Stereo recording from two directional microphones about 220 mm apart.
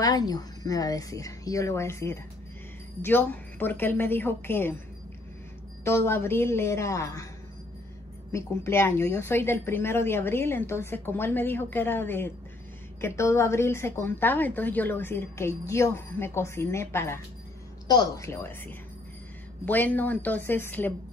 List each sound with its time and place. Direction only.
0.0 s a woman's voice: 15° left (ahead or behind)
5.9 s a woman's voice: 10° left (ahead or behind)
8.3 s a woman's voice: 10° left (ahead or behind)